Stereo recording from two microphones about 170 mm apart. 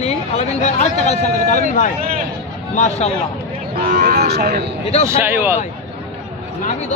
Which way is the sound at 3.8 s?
55° right (ahead or behind).